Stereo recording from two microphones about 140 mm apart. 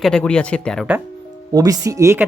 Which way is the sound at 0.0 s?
5° left (ahead or behind).